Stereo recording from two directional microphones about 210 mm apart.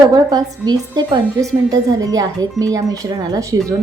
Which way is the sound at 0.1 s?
20° right (ahead or behind).